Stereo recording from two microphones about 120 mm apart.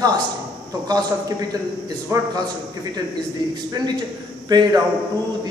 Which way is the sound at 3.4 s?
35° right (ahead or behind).